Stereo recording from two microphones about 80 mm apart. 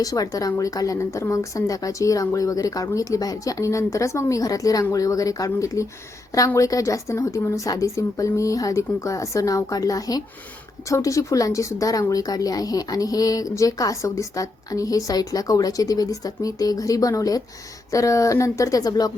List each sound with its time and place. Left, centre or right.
0.0 s speech: left